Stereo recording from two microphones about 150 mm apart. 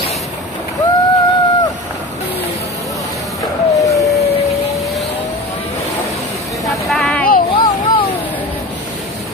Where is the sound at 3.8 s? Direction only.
20° left (ahead or behind).